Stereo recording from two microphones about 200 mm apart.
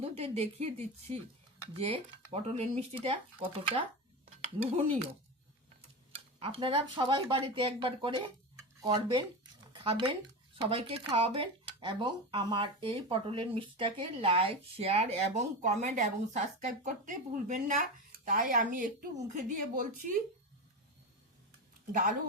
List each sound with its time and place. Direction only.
0.0 s a woman's voice: 30° right (ahead or behind)
4.3 s a sound: 35° right (ahead or behind)
6.4 s a woman's voice: 30° right (ahead or behind)